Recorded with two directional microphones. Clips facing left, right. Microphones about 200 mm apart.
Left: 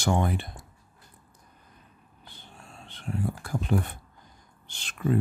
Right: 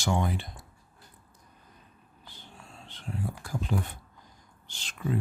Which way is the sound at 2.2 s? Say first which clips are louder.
Left 1 dB; 55° left (ahead or behind).